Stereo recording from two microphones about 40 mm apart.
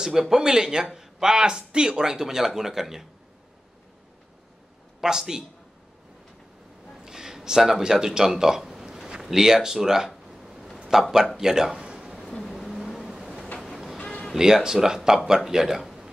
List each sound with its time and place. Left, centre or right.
0.0 s speech: centre
5.0 s speech: centre
7.1 s a sound: centre
7.8 s speech: centre
11.3 s a sound: centre
12.4 s vehicle: centre
14.3 s speech: centre